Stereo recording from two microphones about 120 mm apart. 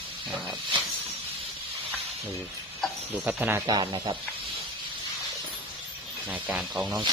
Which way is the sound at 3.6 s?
35° right (ahead or behind).